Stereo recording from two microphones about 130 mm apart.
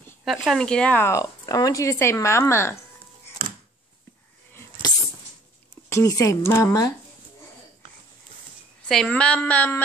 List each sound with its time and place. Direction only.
0.2 s speech: centre (ahead or behind); by 2.8 s 20° left (ahead or behind)
3.4 s a sound: 90° right
5.9 s speech: 25° left (ahead or behind)
8.8 s a woman's voice: 5° left (ahead or behind)